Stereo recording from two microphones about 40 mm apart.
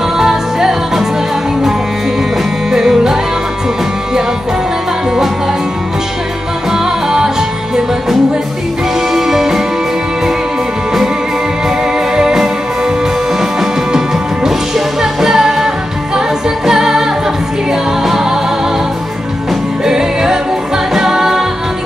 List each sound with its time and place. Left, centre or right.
0.2 s music: centre
2.7 s music: centre
6.7 s music: centre
12.2 s music: centre
19.8 s music: centre